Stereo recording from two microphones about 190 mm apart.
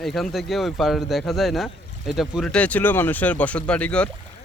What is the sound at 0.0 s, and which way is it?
Speech, centre (ahead or behind).